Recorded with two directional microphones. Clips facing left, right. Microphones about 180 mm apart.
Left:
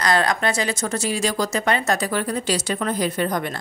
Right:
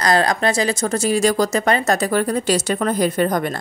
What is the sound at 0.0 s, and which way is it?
Speech, 35° right (ahead or behind).